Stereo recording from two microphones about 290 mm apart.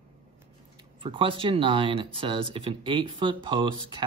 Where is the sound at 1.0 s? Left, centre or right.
Centre.